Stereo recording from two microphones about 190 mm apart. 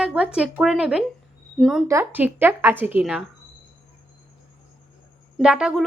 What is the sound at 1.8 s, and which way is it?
A woman's voice, 15° right (ahead or behind).